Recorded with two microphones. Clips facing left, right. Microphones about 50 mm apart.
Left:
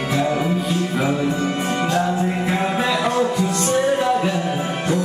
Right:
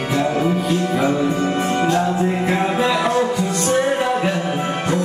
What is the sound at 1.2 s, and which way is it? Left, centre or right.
Music, right.